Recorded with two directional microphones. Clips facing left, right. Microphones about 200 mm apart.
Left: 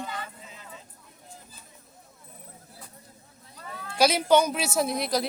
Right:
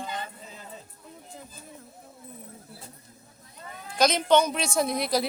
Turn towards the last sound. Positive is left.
turn(degrees=0)  # may be behind; listen again after turning